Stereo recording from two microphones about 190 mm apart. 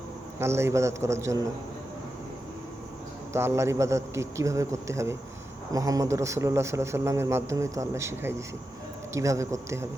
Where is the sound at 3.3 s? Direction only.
15° right (ahead or behind).